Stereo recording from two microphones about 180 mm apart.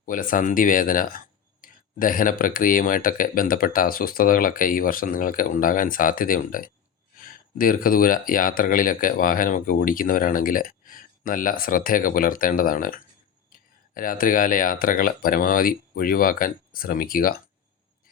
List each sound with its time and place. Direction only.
0.0 s speech: 50° left (ahead or behind)